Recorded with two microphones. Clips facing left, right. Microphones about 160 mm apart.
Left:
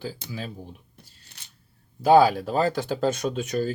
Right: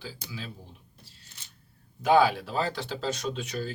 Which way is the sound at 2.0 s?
40° left (ahead or behind).